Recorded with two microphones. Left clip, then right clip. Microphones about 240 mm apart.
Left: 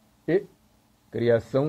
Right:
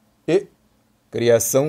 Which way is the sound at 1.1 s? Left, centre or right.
Right.